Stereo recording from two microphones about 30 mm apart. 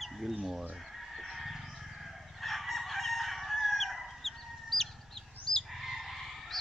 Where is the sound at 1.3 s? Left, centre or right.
Centre.